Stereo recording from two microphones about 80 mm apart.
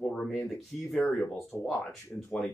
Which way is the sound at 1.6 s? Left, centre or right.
Centre.